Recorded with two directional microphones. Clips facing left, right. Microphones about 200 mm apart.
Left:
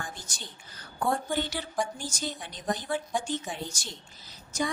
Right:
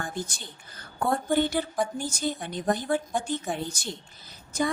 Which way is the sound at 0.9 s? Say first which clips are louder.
Right 4 dB; 55° right (ahead or behind).